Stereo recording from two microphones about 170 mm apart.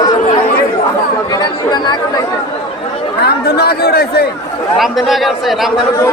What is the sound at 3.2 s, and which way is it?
Speech, 70° left (ahead or behind).